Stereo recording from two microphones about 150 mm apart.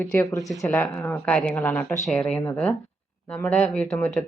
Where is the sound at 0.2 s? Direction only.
25° left (ahead or behind).